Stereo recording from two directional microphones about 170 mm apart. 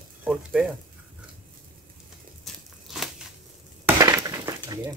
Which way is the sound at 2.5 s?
Centre (ahead or behind).